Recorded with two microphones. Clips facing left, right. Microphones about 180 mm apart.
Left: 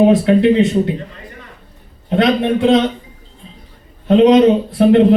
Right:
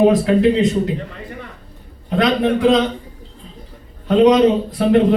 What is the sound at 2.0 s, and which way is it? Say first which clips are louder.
Speech: left 2 dB; 25° left (ahead or behind).